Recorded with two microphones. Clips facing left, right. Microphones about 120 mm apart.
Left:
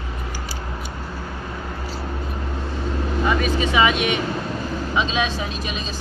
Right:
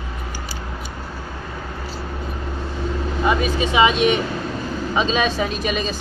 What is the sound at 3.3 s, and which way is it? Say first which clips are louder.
Speech: right 2 dB; 25° right (ahead or behind).